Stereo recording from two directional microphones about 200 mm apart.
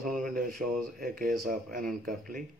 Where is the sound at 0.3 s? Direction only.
45° right (ahead or behind).